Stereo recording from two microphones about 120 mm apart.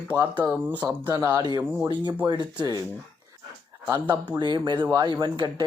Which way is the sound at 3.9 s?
30° right (ahead or behind).